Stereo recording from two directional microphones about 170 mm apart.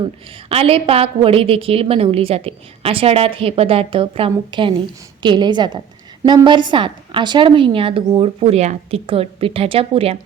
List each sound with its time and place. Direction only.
0.4 s a woman's voice: 35° right (ahead or behind)